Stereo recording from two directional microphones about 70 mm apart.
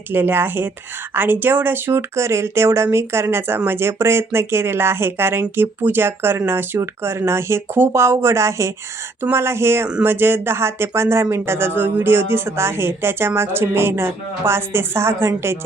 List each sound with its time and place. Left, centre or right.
0.1 s speech: right